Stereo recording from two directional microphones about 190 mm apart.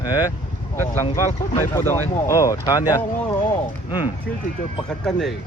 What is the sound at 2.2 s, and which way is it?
Speech, 15° left (ahead or behind).